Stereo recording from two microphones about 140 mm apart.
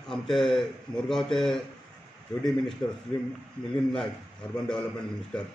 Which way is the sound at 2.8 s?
30° left (ahead or behind).